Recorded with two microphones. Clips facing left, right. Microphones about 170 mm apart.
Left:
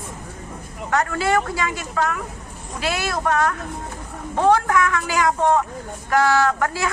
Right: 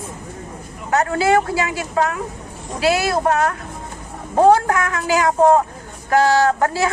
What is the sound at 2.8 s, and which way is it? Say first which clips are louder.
A woman's voice: right 6 dB; 30° right (ahead or behind).